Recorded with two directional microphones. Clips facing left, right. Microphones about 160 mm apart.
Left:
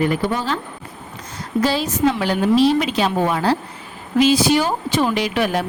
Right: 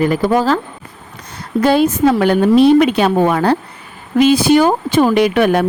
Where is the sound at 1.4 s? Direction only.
60° right (ahead or behind).